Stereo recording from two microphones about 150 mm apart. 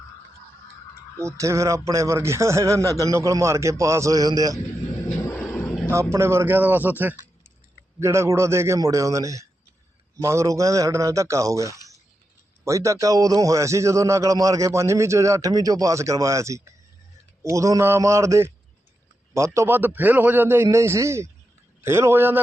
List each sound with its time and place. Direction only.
1.2 s a man's voice: 20° right (ahead or behind)
5.0 s vehicle: 15° left (ahead or behind)
5.9 s a man's voice: 20° right (ahead or behind)